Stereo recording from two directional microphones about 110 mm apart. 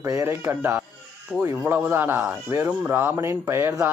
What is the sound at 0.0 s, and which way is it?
Speech, 30° right (ahead or behind).